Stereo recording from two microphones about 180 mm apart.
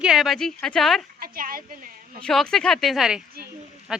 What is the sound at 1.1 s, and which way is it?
Speech, 55° right (ahead or behind).